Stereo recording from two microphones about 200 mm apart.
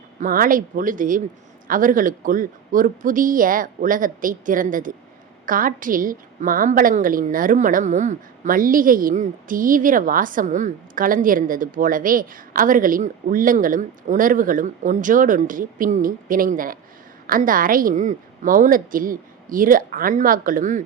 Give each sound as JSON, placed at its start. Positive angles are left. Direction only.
{"t": 0.2, "sound": "a woman's voice", "side_deg": -45}